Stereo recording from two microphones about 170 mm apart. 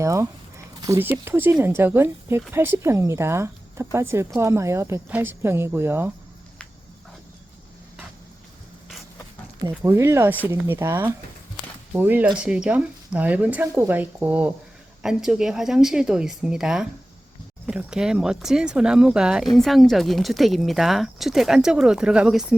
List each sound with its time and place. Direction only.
0.0 s speech: 15° right (ahead or behind)
9.6 s speech: 15° right (ahead or behind)